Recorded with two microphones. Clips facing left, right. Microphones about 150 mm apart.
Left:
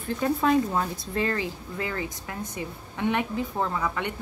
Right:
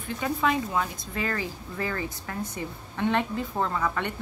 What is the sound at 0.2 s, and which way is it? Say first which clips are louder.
Speech: left 4 dB; 35° left (ahead or behind).